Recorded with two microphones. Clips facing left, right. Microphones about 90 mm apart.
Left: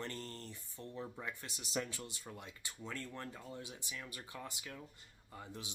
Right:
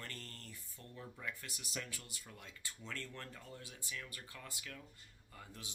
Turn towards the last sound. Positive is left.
turn(degrees=20)  # may be behind; listen again after turning